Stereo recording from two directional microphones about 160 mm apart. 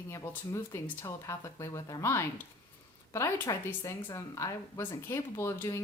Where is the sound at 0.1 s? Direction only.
15° left (ahead or behind).